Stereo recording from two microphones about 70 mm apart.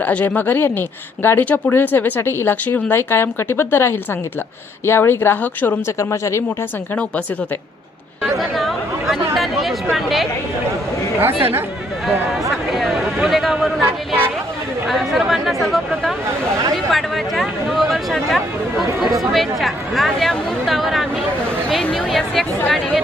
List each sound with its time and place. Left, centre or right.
0.0 s speech: left
6.0 s speech: left
8.2 s chatter: centre
11.2 s speech: right
12.0 s speech: centre
16.7 s a sound: centre
19.3 s speech: centre